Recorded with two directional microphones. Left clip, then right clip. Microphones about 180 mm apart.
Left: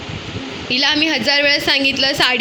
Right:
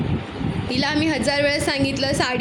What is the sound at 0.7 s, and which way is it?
A woman's voice, 10° right (ahead or behind).